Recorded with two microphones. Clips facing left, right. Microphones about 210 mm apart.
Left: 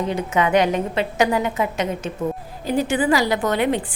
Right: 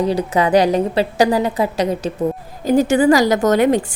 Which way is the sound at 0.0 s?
35° right (ahead or behind).